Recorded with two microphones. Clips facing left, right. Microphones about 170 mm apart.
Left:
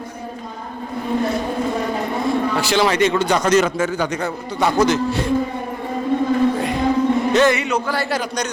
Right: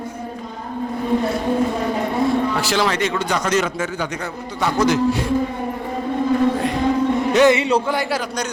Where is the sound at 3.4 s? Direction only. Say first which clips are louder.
Left 4 dB; 40° left (ahead or behind).